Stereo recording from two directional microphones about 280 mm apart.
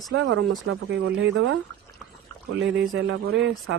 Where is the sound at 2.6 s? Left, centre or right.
Right.